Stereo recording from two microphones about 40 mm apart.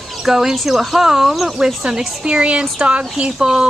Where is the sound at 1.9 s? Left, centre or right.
Right.